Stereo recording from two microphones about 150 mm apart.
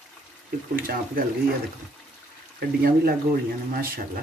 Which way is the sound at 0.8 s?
75° right (ahead or behind).